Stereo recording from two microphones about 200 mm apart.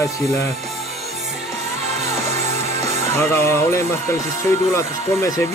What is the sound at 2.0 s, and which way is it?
Music, 35° right (ahead or behind).